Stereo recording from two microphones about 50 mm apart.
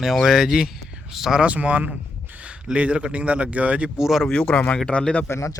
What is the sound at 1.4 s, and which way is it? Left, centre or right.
Speech, right.